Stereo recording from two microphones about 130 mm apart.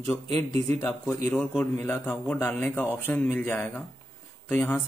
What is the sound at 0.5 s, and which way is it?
Speech, 50° right (ahead or behind).